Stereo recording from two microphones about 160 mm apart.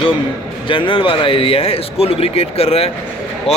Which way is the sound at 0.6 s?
30° left (ahead or behind).